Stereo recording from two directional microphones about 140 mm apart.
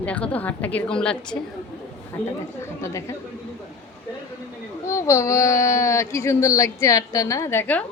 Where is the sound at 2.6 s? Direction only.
20° left (ahead or behind).